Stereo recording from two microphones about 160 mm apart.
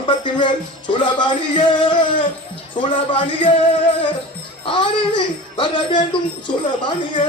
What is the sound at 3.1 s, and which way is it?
Speech, 35° left (ahead or behind).